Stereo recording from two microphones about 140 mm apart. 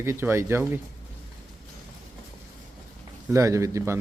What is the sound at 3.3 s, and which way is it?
Speech, 25° right (ahead or behind).